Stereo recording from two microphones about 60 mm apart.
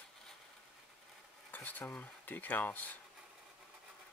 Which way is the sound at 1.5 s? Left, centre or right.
Left.